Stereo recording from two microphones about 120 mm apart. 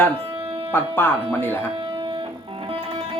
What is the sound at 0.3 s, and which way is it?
Music, 50° right (ahead or behind).